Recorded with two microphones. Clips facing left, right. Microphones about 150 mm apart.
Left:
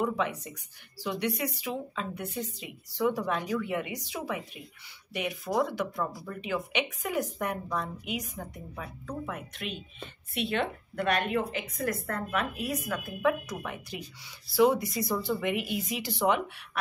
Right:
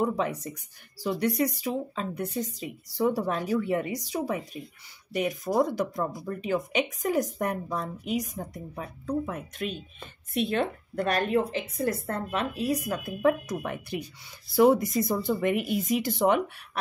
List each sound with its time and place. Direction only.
0.0 s speech: 40° right (ahead or behind)